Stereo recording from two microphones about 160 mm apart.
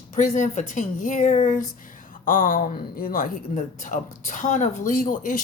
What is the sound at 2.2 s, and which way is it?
A woman's voice, 60° left (ahead or behind).